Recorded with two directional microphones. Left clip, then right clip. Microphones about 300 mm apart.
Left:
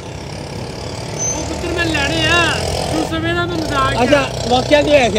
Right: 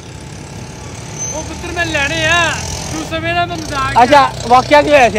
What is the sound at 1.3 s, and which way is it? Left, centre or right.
Vehicle, centre.